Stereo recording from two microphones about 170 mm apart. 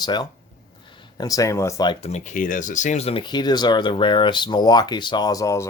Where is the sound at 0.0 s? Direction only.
25° left (ahead or behind).